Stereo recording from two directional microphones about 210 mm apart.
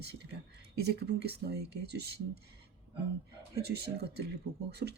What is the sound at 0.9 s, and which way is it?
Speech, 50° right (ahead or behind).